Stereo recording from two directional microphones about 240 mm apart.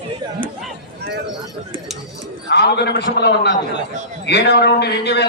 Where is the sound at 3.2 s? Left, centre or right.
Left.